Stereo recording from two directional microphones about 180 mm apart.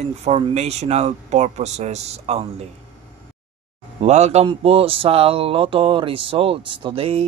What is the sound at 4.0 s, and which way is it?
Speech, 40° right (ahead or behind).